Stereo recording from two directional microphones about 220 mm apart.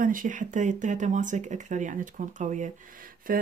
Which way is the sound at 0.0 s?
40° right (ahead or behind).